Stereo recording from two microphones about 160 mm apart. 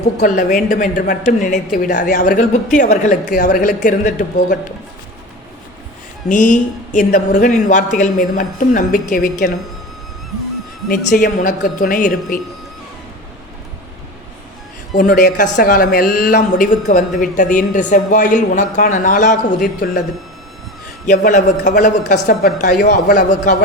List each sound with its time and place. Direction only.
0.2 s speech: 55° left (ahead or behind)
6.2 s speech: 50° left (ahead or behind); by 9.5 s 65° left (ahead or behind)
10.8 s speech: 60° left (ahead or behind)
14.9 s speech: 75° left (ahead or behind)
21.3 s speech: 50° left (ahead or behind)